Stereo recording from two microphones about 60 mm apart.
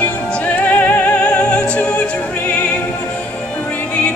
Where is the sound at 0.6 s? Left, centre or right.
Left.